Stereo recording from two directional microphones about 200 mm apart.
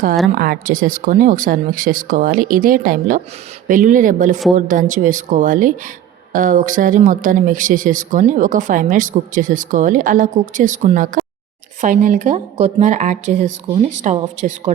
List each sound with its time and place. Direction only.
0.3 s speech: 45° right (ahead or behind)